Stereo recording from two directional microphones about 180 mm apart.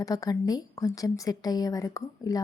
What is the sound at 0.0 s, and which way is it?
A woman's voice, 20° left (ahead or behind).